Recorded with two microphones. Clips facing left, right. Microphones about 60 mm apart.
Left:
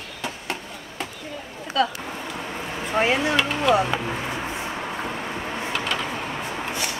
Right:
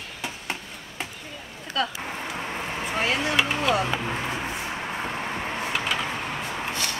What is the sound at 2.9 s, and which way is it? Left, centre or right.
Speech, left.